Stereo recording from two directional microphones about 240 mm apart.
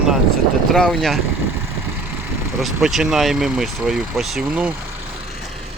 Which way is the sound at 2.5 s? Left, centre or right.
Centre.